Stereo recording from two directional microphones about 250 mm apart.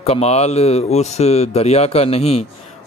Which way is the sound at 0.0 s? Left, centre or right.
Left.